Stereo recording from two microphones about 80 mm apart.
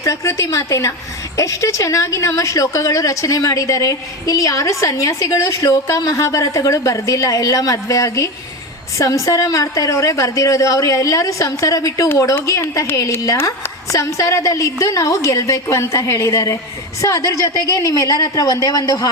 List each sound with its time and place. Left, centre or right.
0.0 s a woman's voice: left